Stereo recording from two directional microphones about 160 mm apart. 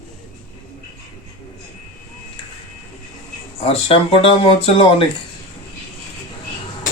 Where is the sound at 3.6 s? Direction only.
35° left (ahead or behind).